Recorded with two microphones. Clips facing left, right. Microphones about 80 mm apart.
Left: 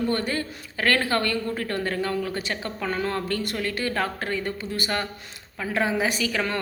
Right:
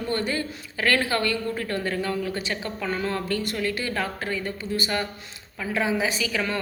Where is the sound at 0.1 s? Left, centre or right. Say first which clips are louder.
Even; left.